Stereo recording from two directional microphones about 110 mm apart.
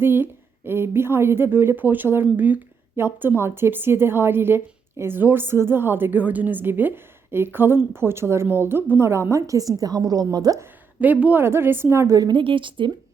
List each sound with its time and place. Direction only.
0.0 s a woman's voice: 20° right (ahead or behind)
10.6 s a woman's voice: 15° right (ahead or behind); by 12.4 s 35° right (ahead or behind)
12.4 s a woman's voice: 50° right (ahead or behind)